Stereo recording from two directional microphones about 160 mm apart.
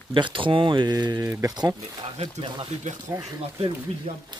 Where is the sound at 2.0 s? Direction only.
40° right (ahead or behind).